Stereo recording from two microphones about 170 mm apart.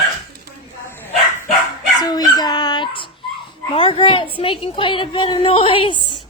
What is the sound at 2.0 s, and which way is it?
A woman's voice, 25° left (ahead or behind).